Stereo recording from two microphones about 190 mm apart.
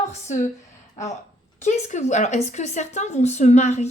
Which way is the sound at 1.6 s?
35° left (ahead or behind).